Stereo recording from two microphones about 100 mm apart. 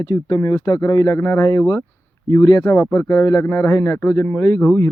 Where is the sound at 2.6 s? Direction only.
25° left (ahead or behind).